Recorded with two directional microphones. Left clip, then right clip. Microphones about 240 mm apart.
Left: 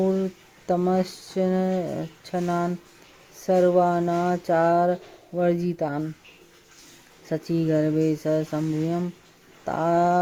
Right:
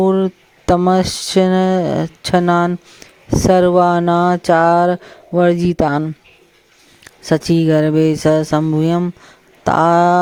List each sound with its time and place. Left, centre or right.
0.0 s a sound: right
0.7 s speech: right
7.3 s speech: right